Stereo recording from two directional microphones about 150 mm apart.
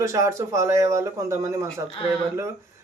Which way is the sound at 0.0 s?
20° right (ahead or behind).